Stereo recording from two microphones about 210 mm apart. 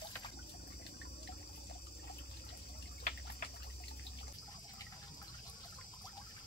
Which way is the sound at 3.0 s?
45° left (ahead or behind).